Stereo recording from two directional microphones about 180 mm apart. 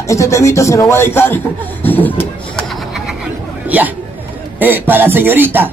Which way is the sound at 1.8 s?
10° left (ahead or behind).